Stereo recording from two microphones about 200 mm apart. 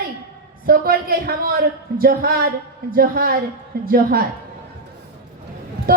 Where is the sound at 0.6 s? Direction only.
50° right (ahead or behind).